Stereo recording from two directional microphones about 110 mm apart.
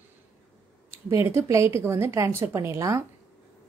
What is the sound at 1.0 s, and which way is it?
Speech, 25° right (ahead or behind).